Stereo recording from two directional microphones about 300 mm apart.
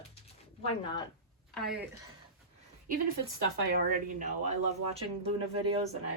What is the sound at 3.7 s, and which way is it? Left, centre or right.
Speech, right.